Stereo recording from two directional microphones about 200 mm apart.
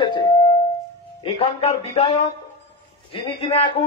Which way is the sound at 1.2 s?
30° left (ahead or behind).